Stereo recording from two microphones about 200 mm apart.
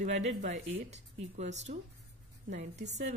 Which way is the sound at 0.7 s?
35° right (ahead or behind).